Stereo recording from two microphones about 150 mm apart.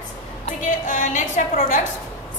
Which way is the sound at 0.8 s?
55° left (ahead or behind).